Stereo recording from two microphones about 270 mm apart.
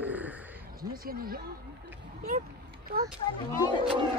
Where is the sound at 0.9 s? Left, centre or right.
Right.